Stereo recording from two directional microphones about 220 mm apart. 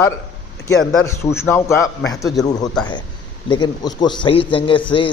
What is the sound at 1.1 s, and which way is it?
A man's voice, 10° left (ahead or behind).